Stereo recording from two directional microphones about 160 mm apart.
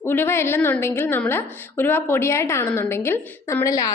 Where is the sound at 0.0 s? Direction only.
15° left (ahead or behind).